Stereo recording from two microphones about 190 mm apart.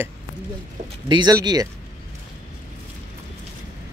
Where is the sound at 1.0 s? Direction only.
20° right (ahead or behind).